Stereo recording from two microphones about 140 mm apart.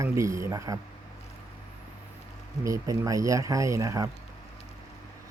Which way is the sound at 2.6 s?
25° right (ahead or behind).